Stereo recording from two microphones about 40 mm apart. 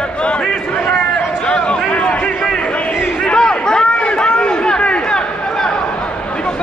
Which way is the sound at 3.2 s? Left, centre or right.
Left.